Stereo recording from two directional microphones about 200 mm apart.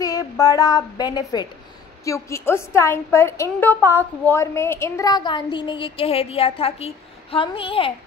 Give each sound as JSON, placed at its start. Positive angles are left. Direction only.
{"t": 0.0, "sound": "a woman's voice", "side_deg": 15}